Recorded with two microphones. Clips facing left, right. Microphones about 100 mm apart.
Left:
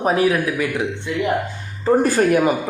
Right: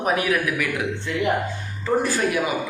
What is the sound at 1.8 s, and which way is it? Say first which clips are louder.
Speech: left 6 dB; 45° left (ahead or behind).